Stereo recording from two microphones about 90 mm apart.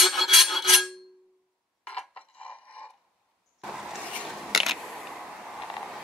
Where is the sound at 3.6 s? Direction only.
5° right (ahead or behind).